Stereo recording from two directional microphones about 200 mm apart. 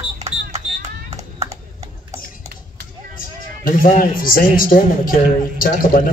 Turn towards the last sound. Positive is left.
turn(degrees=45)  # may be behind; listen again after turning